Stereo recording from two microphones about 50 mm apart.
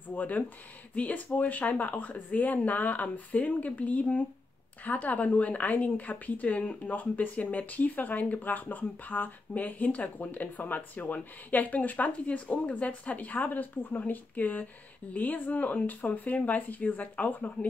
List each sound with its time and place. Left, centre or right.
0.1 s a woman's voice: left